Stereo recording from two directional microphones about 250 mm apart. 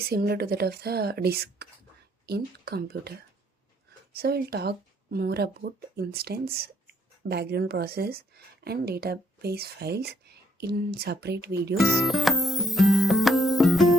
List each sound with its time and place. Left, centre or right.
0.0 s speech: right
4.1 s speech: right
11.8 s music: centre